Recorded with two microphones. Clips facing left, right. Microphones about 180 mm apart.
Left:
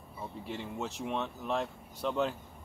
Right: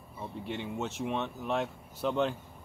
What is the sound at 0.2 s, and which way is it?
Speech, centre (ahead or behind).